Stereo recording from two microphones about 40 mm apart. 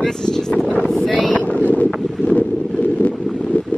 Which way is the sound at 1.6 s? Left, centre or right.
Left.